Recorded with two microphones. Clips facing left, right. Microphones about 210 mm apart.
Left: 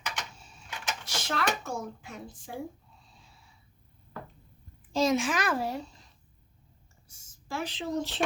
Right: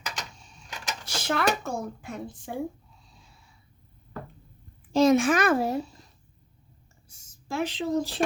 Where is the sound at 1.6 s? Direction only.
50° right (ahead or behind).